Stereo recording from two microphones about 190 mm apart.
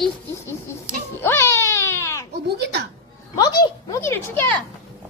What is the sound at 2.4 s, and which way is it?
Speech, 60° right (ahead or behind).